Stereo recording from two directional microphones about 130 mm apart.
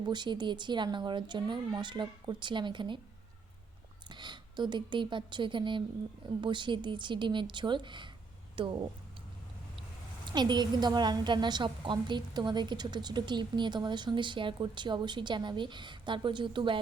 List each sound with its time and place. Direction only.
0.1 s a woman's voice: 35° right (ahead or behind)
4.1 s a woman's voice: 35° right (ahead or behind)
10.3 s a woman's voice: 35° right (ahead or behind)